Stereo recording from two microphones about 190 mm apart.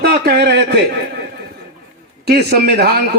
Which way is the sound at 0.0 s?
60° right (ahead or behind).